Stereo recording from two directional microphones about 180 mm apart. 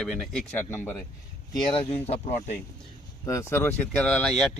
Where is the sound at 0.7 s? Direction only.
15° left (ahead or behind).